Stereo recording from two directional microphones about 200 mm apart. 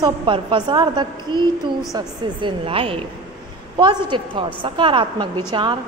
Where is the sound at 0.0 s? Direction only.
25° right (ahead or behind).